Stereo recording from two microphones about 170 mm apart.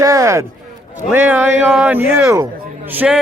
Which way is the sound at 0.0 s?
20° right (ahead or behind).